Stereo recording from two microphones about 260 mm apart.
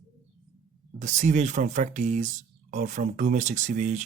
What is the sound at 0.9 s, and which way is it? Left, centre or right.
Speech, right.